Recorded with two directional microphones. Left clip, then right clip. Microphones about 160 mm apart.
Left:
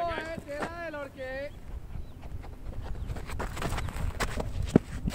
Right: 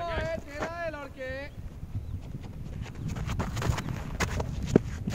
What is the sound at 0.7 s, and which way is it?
Vehicle, 45° right (ahead or behind).